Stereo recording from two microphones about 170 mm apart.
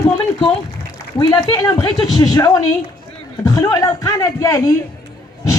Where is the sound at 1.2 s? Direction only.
20° left (ahead or behind).